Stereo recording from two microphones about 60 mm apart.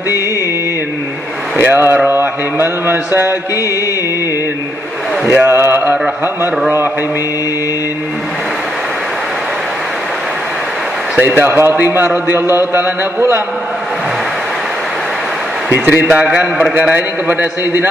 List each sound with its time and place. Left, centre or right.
1.6 s a man's voice: right
5.4 s a man's voice: right
11.1 s a man's voice: right
15.7 s a man's voice: right